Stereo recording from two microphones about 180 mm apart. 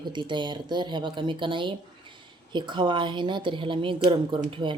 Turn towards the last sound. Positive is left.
turn(degrees=-25)  # may be behind; listen again after turning